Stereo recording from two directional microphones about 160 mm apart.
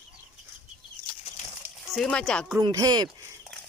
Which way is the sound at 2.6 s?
25° right (ahead or behind).